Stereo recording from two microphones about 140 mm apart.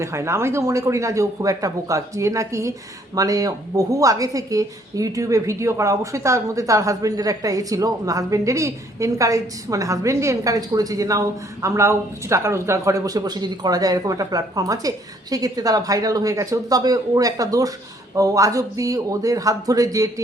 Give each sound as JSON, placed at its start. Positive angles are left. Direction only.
{"t": 0.0, "sound": "a woman's voice", "side_deg": -20}